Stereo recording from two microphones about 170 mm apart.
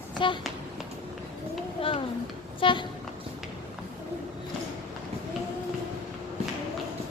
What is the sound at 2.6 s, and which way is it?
Vehicle, 30° left (ahead or behind).